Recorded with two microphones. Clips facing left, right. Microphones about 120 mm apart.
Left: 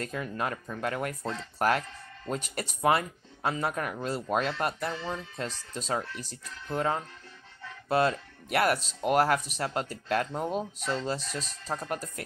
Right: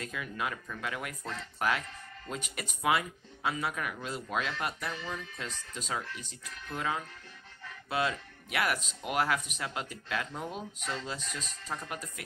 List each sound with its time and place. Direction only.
0.0 s speech: 40° left (ahead or behind)